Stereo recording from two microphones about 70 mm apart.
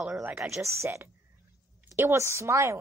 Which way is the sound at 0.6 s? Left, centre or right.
Right.